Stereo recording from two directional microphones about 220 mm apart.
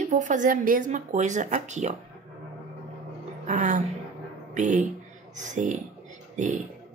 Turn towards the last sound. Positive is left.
turn(degrees=-35)  # may be behind; listen again after turning